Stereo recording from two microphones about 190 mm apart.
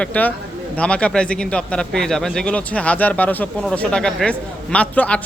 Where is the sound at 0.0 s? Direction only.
5° left (ahead or behind).